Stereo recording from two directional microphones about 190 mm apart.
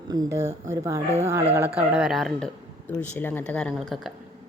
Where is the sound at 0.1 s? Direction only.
20° right (ahead or behind); by 2.5 s centre (ahead or behind).